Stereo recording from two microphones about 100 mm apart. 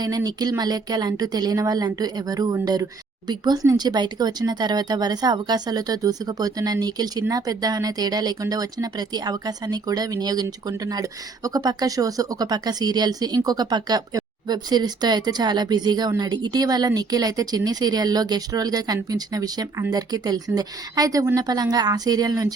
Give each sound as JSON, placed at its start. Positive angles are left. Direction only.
{"t": 0.0, "sound": "speech", "side_deg": -40}